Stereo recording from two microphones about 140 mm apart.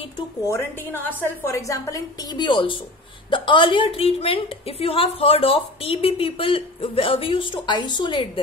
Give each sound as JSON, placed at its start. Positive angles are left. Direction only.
{"t": 0.5, "sound": "a woman's voice", "side_deg": 15}